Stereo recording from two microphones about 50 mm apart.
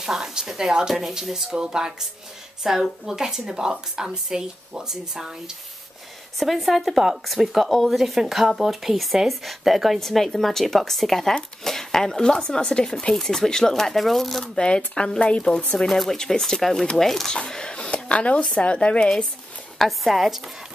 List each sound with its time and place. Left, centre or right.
0.0 s speech: centre
6.4 s speech: centre
14.4 s speech: centre
15.9 s speech: centre; by 19.0 s left
19.8 s speech: centre